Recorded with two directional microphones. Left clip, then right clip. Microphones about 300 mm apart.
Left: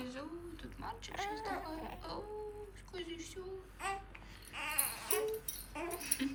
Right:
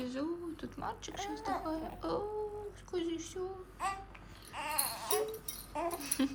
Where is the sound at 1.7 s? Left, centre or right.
Centre.